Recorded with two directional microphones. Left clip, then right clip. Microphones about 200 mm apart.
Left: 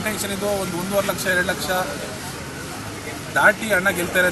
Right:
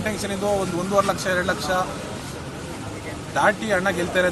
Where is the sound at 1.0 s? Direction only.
Centre (ahead or behind).